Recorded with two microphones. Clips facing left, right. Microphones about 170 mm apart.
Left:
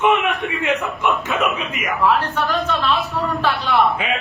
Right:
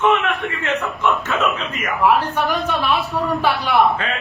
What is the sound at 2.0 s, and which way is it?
Speech, 10° right (ahead or behind).